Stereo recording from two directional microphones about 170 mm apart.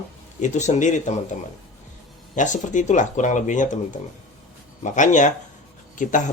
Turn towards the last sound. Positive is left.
turn(degrees=50)  # may be behind; listen again after turning